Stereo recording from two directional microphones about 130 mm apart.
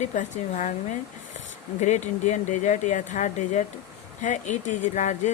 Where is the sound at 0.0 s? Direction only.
70° left (ahead or behind).